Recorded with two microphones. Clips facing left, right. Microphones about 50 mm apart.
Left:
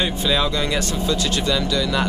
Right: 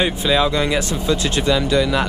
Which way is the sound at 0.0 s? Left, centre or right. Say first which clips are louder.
Right 3 dB; centre.